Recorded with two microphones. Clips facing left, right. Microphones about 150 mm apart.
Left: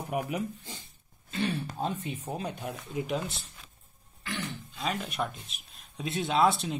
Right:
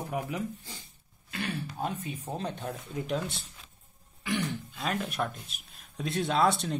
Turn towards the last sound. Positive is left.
turn(degrees=0)  # may be behind; listen again after turning